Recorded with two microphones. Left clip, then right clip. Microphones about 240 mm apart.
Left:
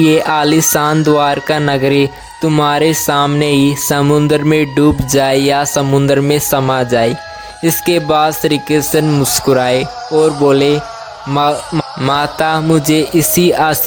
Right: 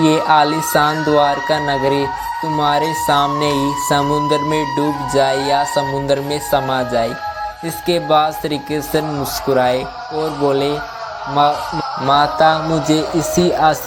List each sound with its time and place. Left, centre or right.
0.0 s speech: left
12.0 s music: left
13.0 s speech: left